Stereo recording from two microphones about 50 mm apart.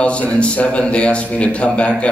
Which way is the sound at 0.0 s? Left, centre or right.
Left.